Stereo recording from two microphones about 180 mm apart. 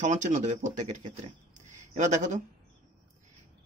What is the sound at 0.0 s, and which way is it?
Speech, 40° right (ahead or behind).